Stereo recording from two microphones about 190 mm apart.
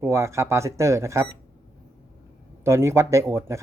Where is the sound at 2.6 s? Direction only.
15° right (ahead or behind).